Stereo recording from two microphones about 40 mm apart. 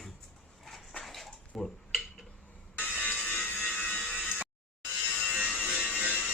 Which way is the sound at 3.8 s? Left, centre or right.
Left.